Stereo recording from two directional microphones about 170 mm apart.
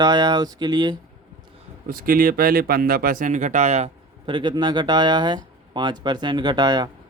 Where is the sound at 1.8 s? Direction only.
55° right (ahead or behind); by 6.9 s 25° right (ahead or behind).